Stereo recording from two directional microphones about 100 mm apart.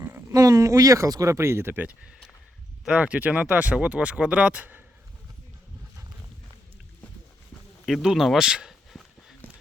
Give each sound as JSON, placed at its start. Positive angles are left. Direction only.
{"t": 0.0, "sound": "a sound", "side_deg": -20}
{"t": 0.3, "sound": "speech", "side_deg": -35}
{"t": 7.9, "sound": "speech", "side_deg": 0}